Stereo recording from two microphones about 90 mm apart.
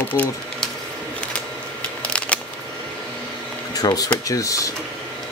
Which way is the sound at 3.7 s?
45° left (ahead or behind).